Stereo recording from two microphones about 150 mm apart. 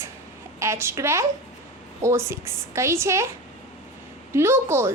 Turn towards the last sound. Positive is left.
turn(degrees=-15)  # may be behind; listen again after turning